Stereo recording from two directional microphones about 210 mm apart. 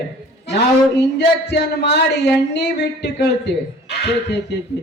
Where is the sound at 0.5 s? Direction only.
55° left (ahead or behind).